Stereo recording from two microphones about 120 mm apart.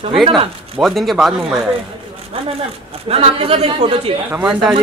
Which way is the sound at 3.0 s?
55° right (ahead or behind).